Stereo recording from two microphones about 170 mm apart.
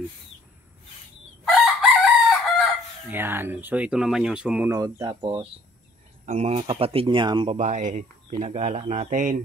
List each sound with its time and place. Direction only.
1.4 s chicken: centre (ahead or behind)
3.1 s speech: 15° right (ahead or behind)
4.6 s speech: 20° right (ahead or behind)
7.5 s speech: 45° right (ahead or behind)